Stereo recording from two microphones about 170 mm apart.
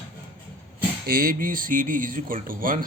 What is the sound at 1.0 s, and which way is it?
Speech, 60° right (ahead or behind).